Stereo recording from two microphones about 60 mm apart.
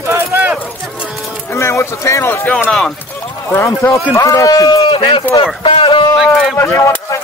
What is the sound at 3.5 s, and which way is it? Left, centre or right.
Speech, left.